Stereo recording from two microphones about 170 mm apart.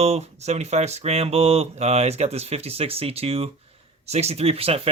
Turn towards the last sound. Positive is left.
turn(degrees=-35)  # may be behind; listen again after turning